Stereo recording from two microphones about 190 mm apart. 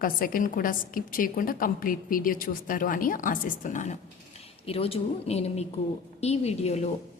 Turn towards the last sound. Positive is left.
turn(degrees=35)  # may be behind; listen again after turning